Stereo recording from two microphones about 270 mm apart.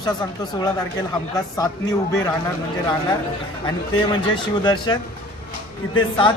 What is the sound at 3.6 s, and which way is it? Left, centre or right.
A man's voice, centre.